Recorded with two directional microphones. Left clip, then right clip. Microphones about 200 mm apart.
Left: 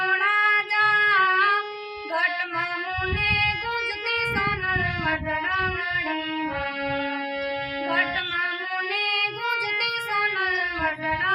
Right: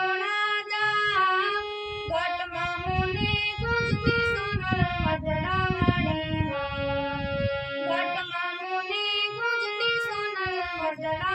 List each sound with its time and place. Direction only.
0.0 s female singing: 30° left (ahead or behind)
0.7 s a sound: 10° left (ahead or behind)
0.9 s singing: 30° left (ahead or behind)
9.0 s music: 10° left (ahead or behind)